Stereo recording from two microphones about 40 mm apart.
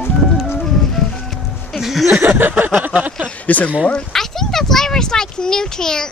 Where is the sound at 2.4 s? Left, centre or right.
Right.